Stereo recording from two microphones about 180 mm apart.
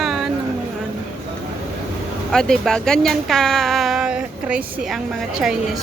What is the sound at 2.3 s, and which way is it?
Speech, 5° left (ahead or behind).